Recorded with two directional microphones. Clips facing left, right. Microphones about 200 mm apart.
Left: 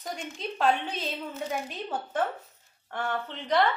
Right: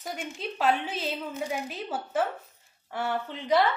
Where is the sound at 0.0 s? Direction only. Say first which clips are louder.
Right 1 dB; 5° right (ahead or behind).